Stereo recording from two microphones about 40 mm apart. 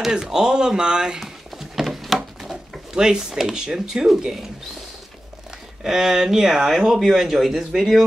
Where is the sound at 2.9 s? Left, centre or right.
Centre.